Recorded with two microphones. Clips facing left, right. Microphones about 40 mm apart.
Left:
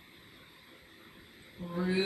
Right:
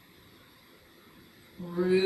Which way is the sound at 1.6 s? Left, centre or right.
Left.